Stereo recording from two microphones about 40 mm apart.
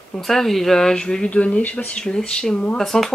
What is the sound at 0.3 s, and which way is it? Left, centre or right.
Speech, centre.